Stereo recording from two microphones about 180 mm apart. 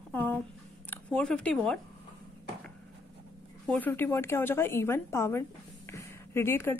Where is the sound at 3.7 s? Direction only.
10° left (ahead or behind).